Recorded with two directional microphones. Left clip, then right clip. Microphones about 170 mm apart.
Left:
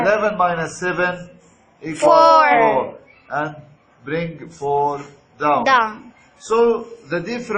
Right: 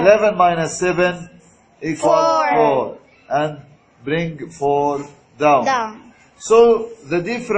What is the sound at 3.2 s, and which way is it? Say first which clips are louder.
A man's voice: right 4 dB; 55° right (ahead or behind).